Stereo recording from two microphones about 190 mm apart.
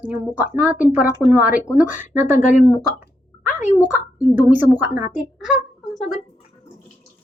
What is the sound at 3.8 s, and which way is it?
Speech, 45° left (ahead or behind).